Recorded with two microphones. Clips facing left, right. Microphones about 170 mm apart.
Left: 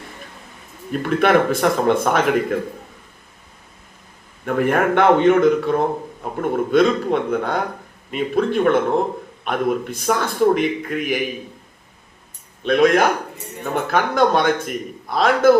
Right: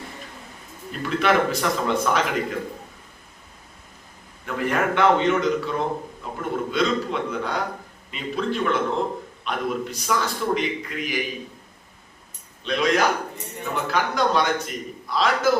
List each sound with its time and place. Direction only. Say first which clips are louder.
1.0 s a man's voice: left 5 dB; 55° left (ahead or behind)
4.4 s a man's voice: left 6 dB; 55° left (ahead or behind)
12.6 s a man's voice: left 6 dB; 55° left (ahead or behind)